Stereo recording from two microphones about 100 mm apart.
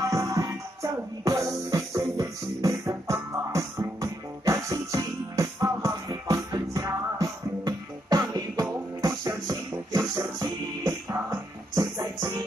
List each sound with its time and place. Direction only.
0.0 s music: 35° right (ahead or behind)